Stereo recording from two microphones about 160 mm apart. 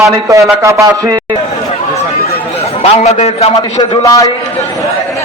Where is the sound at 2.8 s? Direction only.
40° left (ahead or behind).